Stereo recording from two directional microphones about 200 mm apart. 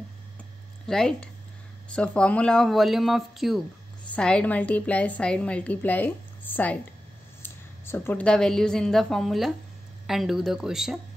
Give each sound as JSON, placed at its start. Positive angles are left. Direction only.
{"t": 0.8, "sound": "a woman's voice", "side_deg": 5}